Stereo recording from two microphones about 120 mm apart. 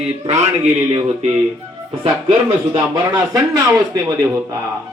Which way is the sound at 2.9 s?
30° right (ahead or behind).